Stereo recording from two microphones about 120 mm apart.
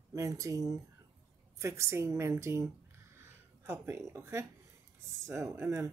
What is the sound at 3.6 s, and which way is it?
A woman's voice, 20° right (ahead or behind).